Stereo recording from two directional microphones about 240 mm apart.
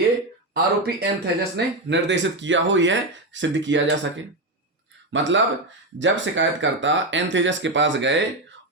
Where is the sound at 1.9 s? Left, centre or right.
Right.